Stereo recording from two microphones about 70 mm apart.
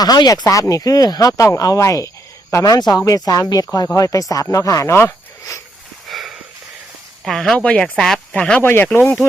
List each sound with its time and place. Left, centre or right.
0.0 s speech: left
0.7 s speech: left
2.7 s speech: left
3.0 s speech: left
6.1 s a sound: centre
7.3 s speech: centre
8.6 s speech: left